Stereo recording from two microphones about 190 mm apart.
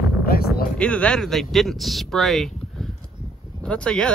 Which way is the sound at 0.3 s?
50° left (ahead or behind).